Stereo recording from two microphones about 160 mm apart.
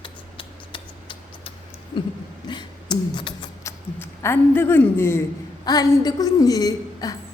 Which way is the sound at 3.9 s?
15° left (ahead or behind).